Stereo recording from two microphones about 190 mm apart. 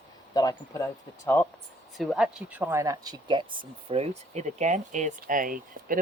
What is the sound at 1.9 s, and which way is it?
Speech, centre (ahead or behind).